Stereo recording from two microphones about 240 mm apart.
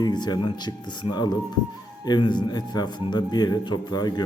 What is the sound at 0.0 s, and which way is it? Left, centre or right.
Speech, centre.